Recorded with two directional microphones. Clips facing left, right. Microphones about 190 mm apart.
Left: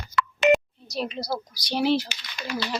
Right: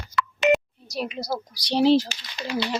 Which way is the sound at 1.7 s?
35° right (ahead or behind).